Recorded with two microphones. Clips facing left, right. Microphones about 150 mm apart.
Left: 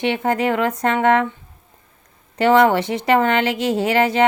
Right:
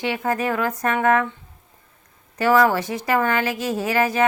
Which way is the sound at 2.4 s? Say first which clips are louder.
Left 3 dB; 25° left (ahead or behind).